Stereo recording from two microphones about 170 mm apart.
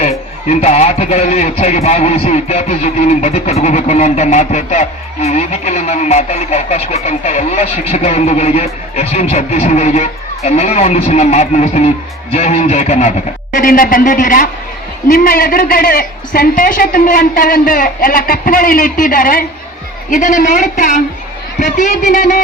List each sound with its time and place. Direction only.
0.0 s a man's voice: 40° left (ahead or behind)